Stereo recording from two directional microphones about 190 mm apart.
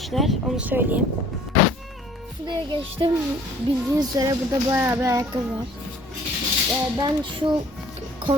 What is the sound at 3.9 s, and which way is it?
Speech, 20° right (ahead or behind).